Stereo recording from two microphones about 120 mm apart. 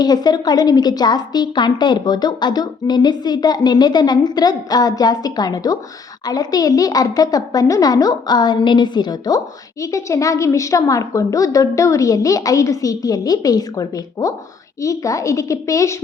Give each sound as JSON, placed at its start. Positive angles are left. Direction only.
{"t": 0.0, "sound": "a woman's voice", "side_deg": 35}